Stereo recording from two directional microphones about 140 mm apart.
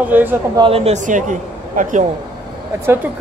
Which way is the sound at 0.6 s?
45° right (ahead or behind).